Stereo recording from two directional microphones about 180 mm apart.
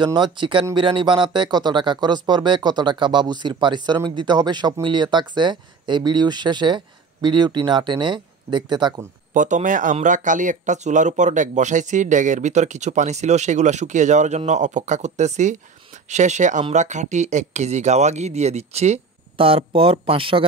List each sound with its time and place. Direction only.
0.0 s speech: 25° right (ahead or behind)
9.3 s speech: 45° right (ahead or behind)